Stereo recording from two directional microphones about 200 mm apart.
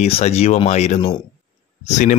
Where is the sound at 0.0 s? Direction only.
30° left (ahead or behind).